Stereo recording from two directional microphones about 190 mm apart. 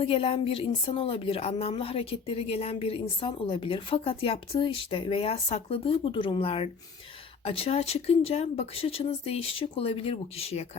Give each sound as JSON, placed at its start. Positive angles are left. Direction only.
{"t": 0.0, "sound": "a woman's voice", "side_deg": 30}